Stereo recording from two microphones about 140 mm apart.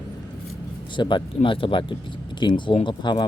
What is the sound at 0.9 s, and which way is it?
Speech, 35° left (ahead or behind).